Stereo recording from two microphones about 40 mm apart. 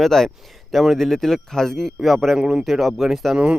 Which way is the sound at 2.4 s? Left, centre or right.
Right.